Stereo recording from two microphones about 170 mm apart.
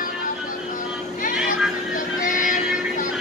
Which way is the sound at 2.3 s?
50° left (ahead or behind).